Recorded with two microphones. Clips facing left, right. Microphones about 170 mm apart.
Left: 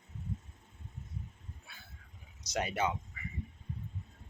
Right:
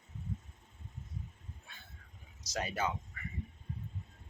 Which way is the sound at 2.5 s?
20° left (ahead or behind).